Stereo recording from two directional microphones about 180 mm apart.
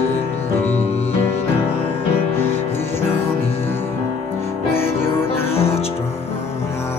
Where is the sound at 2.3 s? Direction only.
10° left (ahead or behind).